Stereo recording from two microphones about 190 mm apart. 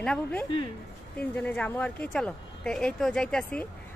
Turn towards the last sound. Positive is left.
turn(degrees=5)  # may be behind; listen again after turning